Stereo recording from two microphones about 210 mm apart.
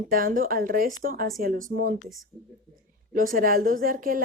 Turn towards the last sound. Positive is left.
turn(degrees=-40)  # may be behind; listen again after turning